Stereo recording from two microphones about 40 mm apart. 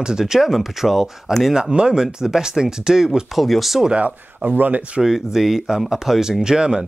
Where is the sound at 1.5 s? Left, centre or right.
Centre.